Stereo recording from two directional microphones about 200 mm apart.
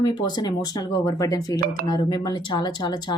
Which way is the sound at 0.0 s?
20° left (ahead or behind).